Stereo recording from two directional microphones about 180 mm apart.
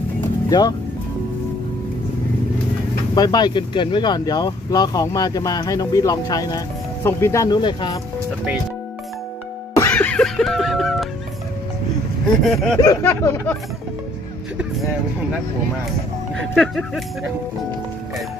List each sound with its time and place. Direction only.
0.5 s speech: 25° left (ahead or behind)
3.2 s speech: 20° left (ahead or behind)
9.8 s music: 10° left (ahead or behind)
12.4 s speech: centre (ahead or behind)
12.8 s speech: 15° left (ahead or behind)
16.3 s speech: centre (ahead or behind)